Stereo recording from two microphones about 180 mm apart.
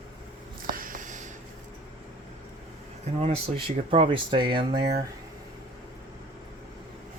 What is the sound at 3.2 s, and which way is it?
Speech, 30° right (ahead or behind).